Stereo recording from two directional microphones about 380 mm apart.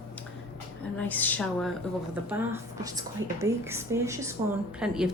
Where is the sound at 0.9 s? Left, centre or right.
Centre.